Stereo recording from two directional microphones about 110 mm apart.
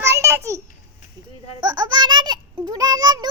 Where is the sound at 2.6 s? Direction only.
40° right (ahead or behind).